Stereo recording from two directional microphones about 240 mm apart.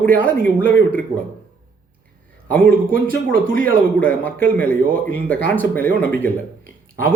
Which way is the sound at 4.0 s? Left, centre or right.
Centre.